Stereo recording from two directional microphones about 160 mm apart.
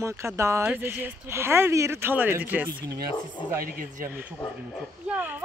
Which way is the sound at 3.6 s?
65° right (ahead or behind).